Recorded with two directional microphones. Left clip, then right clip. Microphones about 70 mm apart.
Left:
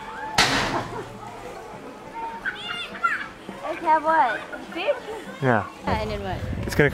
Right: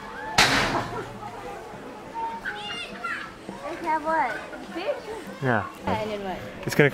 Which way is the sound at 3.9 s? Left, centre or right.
Left.